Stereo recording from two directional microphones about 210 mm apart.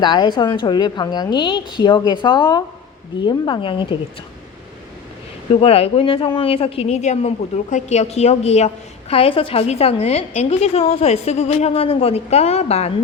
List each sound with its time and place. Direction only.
0.0 s speech: 20° left (ahead or behind)
5.5 s speech: 30° left (ahead or behind)